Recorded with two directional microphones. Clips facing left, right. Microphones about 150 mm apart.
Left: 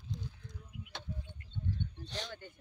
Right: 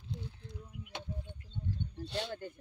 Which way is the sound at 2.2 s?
35° right (ahead or behind).